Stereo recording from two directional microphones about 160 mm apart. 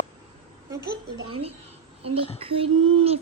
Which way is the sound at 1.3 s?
35° right (ahead or behind).